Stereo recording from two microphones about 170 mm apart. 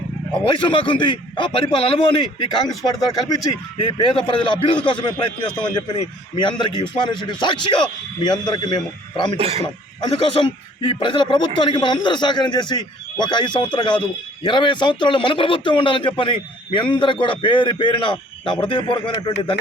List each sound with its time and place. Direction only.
0.4 s a man's voice: 30° left (ahead or behind)
9.4 s speech: 35° right (ahead or behind)
10.0 s a man's voice: 30° left (ahead or behind)